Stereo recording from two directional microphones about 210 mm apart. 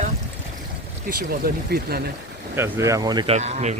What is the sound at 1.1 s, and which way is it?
Speech, 45° right (ahead or behind).